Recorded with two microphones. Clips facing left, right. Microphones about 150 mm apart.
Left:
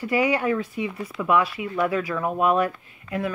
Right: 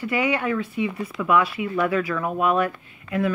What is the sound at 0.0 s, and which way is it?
Speech, 35° left (ahead or behind).